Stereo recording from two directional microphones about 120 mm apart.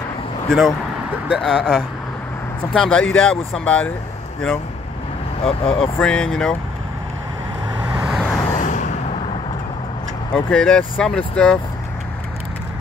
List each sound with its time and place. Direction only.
0.5 s speech: 5° left (ahead or behind)
5.4 s speech: 50° left (ahead or behind)
6.0 s speech: 5° left (ahead or behind)
7.9 s vehicle: 10° right (ahead or behind)
8.5 s vehicle: 90° left
10.3 s speech: 5° left (ahead or behind)